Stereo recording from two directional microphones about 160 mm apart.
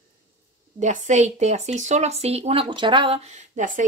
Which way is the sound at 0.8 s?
50° right (ahead or behind).